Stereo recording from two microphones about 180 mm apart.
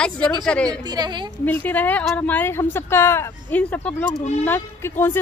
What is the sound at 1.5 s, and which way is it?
Speech, 10° left (ahead or behind).